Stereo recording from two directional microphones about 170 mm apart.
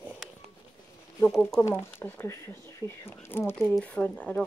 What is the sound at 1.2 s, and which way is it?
A woman's voice, 5° left (ahead or behind).